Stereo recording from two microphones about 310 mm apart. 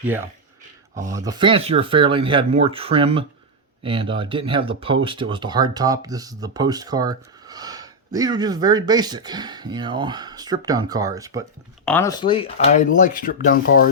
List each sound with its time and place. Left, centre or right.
1.1 s speech: centre
11.9 s speech: centre; by 13.7 s left